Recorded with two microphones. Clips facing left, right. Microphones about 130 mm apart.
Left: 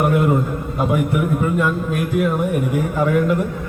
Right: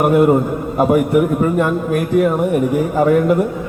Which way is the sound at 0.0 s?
45° right (ahead or behind).